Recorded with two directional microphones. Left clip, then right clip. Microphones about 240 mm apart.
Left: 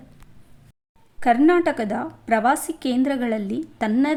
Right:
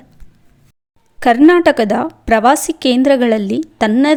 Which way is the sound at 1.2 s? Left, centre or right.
Right.